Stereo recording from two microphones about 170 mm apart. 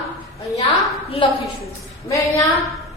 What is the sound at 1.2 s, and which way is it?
Speech, 30° left (ahead or behind).